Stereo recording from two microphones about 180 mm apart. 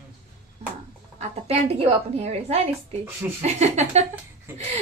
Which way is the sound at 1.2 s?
35° right (ahead or behind).